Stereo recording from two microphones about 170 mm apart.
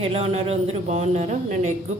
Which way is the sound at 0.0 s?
35° right (ahead or behind).